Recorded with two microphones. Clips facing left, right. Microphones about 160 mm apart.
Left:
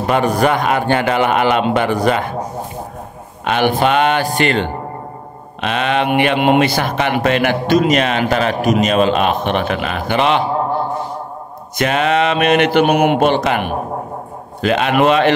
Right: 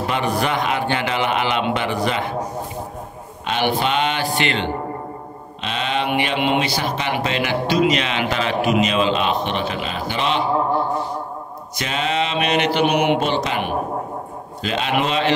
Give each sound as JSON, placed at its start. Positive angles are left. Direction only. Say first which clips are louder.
{"t": 0.1, "sound": "speech", "louder": "left 8 dB", "side_deg": 45}
{"t": 3.4, "sound": "speech", "louder": "left 6 dB", "side_deg": 55}
{"t": 5.6, "sound": "speech", "louder": "left 6 dB", "side_deg": 60}
{"t": 11.8, "sound": "speech", "louder": "left 7 dB", "side_deg": 60}